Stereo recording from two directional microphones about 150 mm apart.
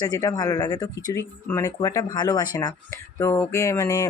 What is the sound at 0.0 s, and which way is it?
Speech, 25° left (ahead or behind).